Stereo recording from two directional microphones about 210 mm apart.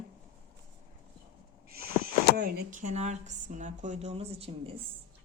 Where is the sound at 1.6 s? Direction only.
45° right (ahead or behind).